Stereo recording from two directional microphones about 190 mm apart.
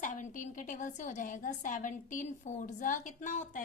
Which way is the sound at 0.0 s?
45° left (ahead or behind).